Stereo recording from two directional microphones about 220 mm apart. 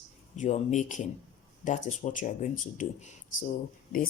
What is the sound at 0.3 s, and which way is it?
Speech, 35° left (ahead or behind).